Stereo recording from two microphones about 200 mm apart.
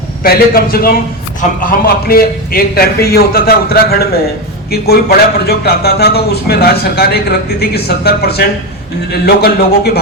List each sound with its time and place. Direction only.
0.2 s a man's voice: 50° left (ahead or behind)